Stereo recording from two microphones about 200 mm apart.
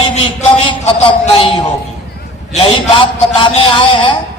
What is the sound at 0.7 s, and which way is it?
A man's voice, 25° left (ahead or behind).